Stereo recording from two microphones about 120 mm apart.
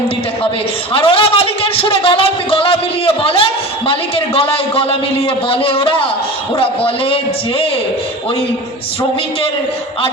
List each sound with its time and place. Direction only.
0.9 s a man's voice: 45° left (ahead or behind)